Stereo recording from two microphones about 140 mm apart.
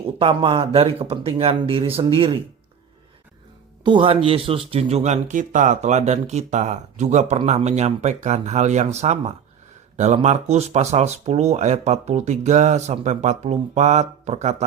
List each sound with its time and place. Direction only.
0.0 s speech: 40° right (ahead or behind)
3.8 s speech: 40° right (ahead or behind); by 14.5 s 55° right (ahead or behind)